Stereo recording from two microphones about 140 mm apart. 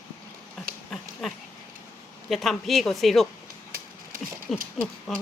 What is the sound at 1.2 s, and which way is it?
Speech, centre (ahead or behind).